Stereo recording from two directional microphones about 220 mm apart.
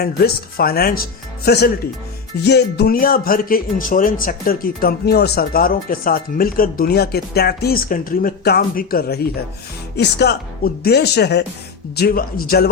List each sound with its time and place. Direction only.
0.0 s speech: 45° left (ahead or behind)